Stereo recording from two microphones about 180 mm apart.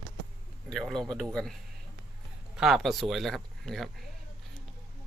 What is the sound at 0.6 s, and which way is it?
Speech, 5° left (ahead or behind).